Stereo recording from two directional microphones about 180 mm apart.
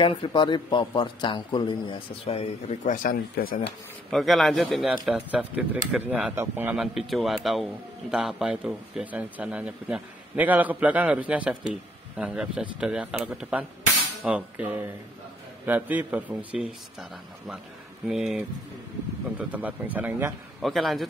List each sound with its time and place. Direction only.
0.0 s a man's voice: 30° left (ahead or behind); by 3.7 s 55° left (ahead or behind)
4.1 s a man's voice: centre (ahead or behind)
18.0 s a man's voice: centre (ahead or behind)
20.6 s a man's voice: centre (ahead or behind)